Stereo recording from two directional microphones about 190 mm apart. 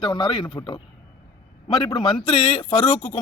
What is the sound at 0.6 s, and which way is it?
Speech, 15° left (ahead or behind).